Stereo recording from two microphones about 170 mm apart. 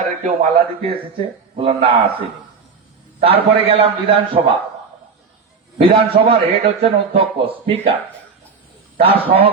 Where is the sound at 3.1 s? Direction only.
35° right (ahead or behind).